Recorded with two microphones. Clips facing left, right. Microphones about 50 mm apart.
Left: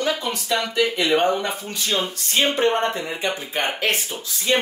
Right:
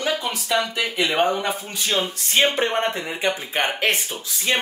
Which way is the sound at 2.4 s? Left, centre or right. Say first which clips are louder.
Left 3 dB; centre.